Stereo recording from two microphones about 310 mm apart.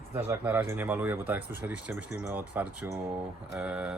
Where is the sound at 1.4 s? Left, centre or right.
Left.